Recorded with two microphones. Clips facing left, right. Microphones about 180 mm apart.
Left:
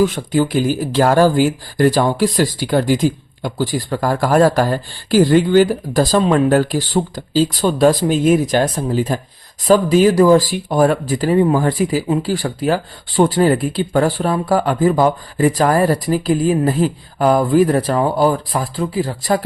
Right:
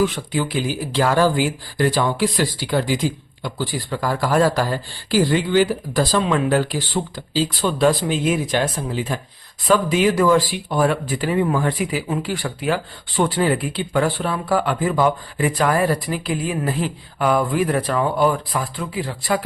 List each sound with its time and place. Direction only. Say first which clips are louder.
0.0 s speech: left 5 dB; 45° left (ahead or behind)